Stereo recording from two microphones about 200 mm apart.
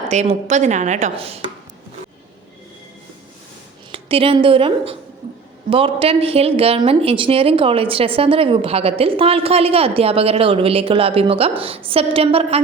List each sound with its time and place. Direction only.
0.1 s a woman's voice: 35° right (ahead or behind)
3.9 s a woman's voice: 25° right (ahead or behind)